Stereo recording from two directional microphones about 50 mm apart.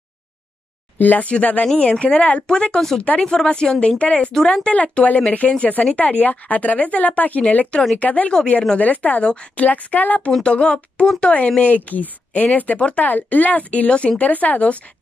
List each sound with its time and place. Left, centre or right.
0.9 s speech: left
2.4 s speech: centre
3.0 s speech: left
5.0 s speech: left
9.2 s speech: left
9.7 s speech: left
10.4 s speech: left